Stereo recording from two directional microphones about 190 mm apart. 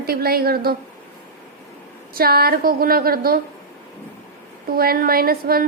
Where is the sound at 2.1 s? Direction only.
50° right (ahead or behind).